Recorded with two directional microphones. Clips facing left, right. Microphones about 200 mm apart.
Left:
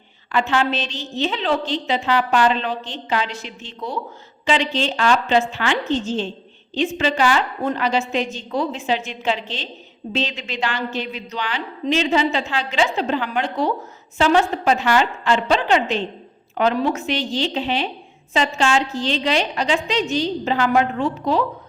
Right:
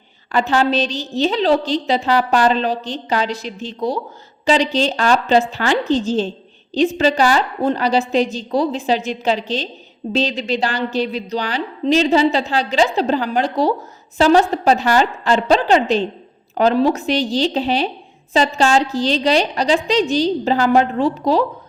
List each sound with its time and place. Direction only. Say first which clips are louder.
0.3 s a woman's voice: right 3 dB; 40° right (ahead or behind)